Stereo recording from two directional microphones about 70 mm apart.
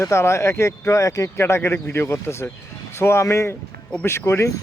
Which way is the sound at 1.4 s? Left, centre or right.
Left.